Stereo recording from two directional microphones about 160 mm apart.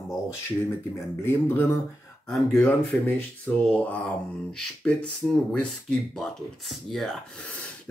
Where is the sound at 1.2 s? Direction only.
15° left (ahead or behind).